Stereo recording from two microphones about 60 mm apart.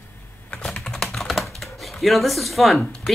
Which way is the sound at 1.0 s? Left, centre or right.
Centre.